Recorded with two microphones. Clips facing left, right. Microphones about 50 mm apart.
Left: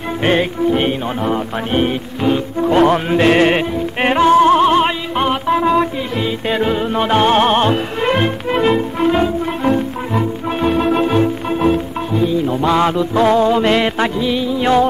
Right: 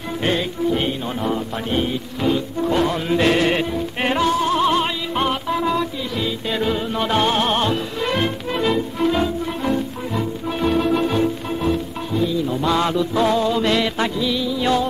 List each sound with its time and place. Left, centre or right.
0.2 s music: left
10.7 s organ: left
12.1 s music: left